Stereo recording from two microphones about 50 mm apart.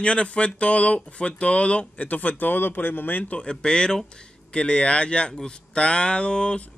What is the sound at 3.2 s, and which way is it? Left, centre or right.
Speech, left.